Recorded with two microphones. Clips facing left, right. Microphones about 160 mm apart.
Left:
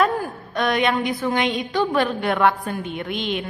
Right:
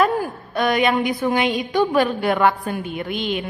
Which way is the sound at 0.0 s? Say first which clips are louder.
Right 2 dB; 5° right (ahead or behind).